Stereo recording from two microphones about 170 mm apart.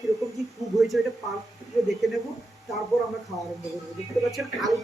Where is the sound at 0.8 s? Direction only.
Centre (ahead or behind).